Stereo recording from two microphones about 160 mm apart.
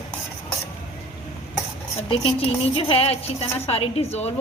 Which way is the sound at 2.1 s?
35° left (ahead or behind).